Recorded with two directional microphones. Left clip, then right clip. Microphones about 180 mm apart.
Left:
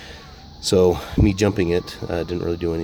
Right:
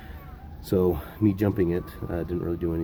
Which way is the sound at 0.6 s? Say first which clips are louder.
Left 8 dB; 30° left (ahead or behind).